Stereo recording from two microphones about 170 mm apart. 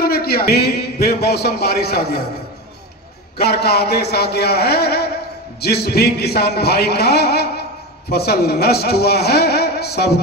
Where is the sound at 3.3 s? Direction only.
70° left (ahead or behind).